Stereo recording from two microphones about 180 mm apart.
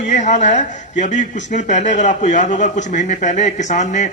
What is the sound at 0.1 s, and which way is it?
A man's voice, 40° left (ahead or behind).